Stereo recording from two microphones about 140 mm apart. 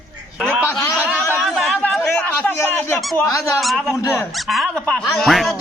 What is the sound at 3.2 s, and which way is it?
Speech, 20° left (ahead or behind).